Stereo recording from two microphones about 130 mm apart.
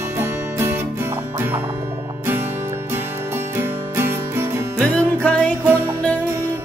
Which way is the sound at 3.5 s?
20° right (ahead or behind).